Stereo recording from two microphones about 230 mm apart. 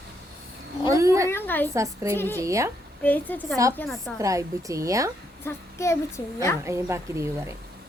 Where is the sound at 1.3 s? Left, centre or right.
Centre.